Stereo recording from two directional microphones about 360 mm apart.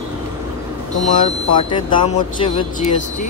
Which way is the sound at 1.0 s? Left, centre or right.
Centre.